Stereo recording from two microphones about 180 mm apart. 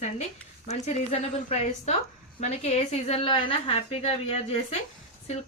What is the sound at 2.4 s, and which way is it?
A woman's voice, 35° left (ahead or behind).